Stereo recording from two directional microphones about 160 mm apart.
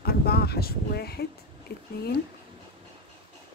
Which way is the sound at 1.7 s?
90° left.